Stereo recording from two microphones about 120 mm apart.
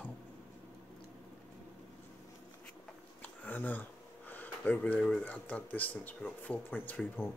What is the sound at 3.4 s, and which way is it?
Speech, 15° left (ahead or behind).